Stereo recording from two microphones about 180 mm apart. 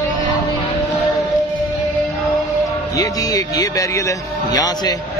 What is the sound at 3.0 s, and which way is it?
Speech, 20° left (ahead or behind).